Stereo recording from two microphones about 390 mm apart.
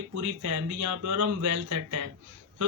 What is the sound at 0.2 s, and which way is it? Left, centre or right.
Speech, right.